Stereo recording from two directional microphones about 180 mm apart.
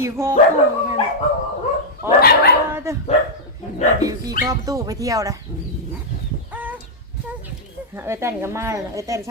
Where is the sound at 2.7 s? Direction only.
15° right (ahead or behind).